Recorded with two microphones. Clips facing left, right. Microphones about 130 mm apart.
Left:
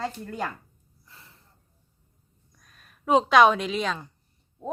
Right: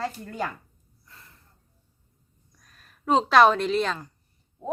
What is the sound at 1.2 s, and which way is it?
Gasp, 30° left (ahead or behind).